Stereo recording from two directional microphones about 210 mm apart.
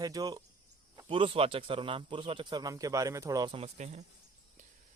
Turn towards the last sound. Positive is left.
turn(degrees=-35)  # may be behind; listen again after turning